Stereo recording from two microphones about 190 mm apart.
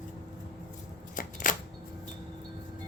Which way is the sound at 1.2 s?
45° left (ahead or behind).